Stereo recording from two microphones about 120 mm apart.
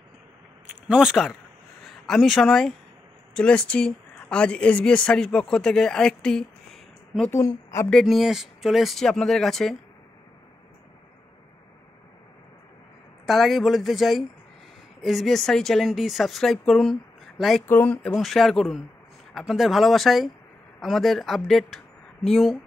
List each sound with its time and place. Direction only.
0.8 s speech: 5° right (ahead or behind)
7.2 s a woman's voice: 25° left (ahead or behind)
7.9 s speech: centre (ahead or behind)
13.2 s speech: centre (ahead or behind)
17.6 s speech: 15° left (ahead or behind); by 22.6 s centre (ahead or behind)